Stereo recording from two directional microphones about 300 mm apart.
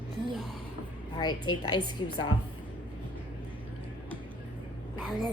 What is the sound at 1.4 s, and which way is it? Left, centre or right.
Speech, left.